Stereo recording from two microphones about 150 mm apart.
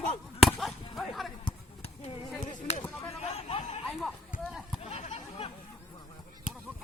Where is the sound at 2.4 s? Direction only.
55° left (ahead or behind).